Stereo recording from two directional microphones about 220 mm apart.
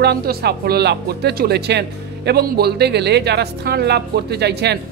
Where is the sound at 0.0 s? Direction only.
45° right (ahead or behind).